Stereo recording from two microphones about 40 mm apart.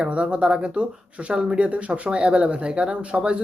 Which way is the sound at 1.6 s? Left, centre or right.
Right.